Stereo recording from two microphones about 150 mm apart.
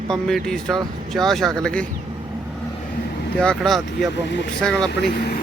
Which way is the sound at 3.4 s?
5° left (ahead or behind).